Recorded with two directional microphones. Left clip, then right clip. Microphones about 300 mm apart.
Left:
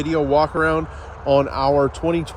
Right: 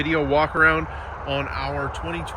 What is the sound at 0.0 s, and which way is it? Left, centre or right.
Speech, centre.